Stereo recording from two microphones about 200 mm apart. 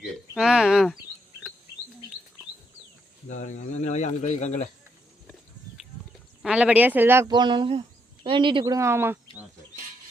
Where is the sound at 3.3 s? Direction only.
35° left (ahead or behind).